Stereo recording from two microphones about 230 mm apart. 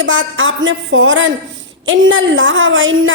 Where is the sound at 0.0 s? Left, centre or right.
Right.